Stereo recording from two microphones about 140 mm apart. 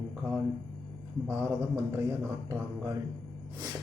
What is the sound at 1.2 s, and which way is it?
Speech, 20° right (ahead or behind).